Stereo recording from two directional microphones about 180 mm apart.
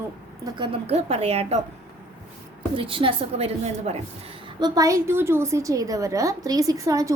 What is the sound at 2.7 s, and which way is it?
A woman's voice, 30° right (ahead or behind).